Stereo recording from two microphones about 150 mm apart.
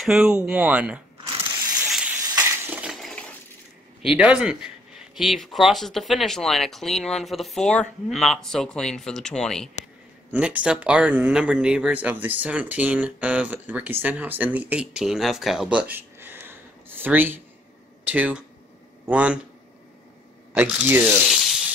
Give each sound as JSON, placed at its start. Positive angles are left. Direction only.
{"t": 0.0, "sound": "speech", "side_deg": -5}
{"t": 1.2, "sound": "a sound", "side_deg": -30}
{"t": 2.3, "sound": "chink", "side_deg": -15}
{"t": 4.0, "sound": "speech", "side_deg": -5}
{"t": 10.3, "sound": "speech", "side_deg": -10}
{"t": 20.5, "sound": "speech", "side_deg": -10}
{"t": 21.1, "sound": "sizzle", "side_deg": -5}